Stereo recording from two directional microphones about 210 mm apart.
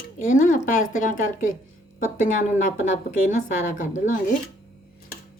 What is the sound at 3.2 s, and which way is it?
Speech, 40° left (ahead or behind).